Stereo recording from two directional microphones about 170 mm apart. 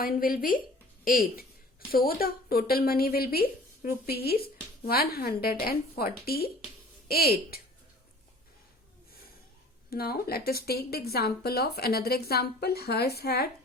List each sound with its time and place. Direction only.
0.0 s a woman's voice: 55° left (ahead or behind)
9.9 s speech: 65° left (ahead or behind)